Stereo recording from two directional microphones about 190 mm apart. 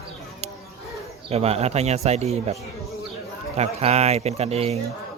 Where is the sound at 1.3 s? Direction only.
35° right (ahead or behind).